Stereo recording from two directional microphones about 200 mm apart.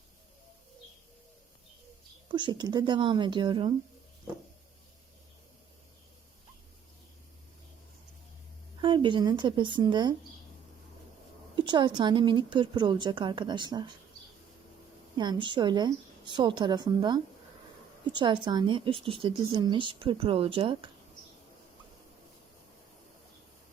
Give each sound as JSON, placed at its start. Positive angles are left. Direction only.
{"t": 2.3, "sound": "speech", "side_deg": -20}
{"t": 8.8, "sound": "speech", "side_deg": -25}
{"t": 11.5, "sound": "speech", "side_deg": -20}
{"t": 15.2, "sound": "speech", "side_deg": -25}